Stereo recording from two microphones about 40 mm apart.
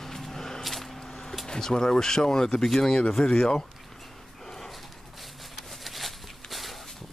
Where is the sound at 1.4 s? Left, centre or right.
Centre.